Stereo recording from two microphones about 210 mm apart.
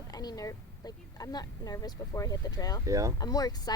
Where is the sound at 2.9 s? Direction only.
15° right (ahead or behind).